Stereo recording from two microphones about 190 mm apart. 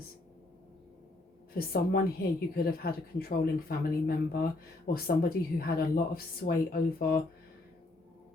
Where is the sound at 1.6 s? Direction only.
55° left (ahead or behind).